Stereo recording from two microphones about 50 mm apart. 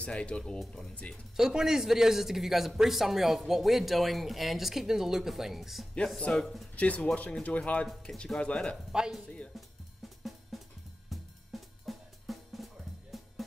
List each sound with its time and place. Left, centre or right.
0.0 s speech: left
1.3 s a man's voice: centre
6.3 s speech: centre
8.9 s speech: centre
10.0 s drum kit: centre
11.8 s drum: centre
13.1 s drum kit: centre